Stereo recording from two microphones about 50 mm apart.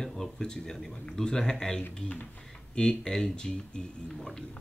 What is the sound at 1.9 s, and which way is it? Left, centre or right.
Speech, left.